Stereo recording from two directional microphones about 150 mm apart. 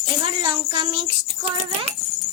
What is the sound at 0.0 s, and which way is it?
Speech, 35° right (ahead or behind).